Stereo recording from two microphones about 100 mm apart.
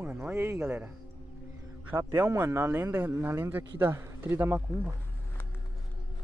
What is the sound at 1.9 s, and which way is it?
Speech, 20° right (ahead or behind).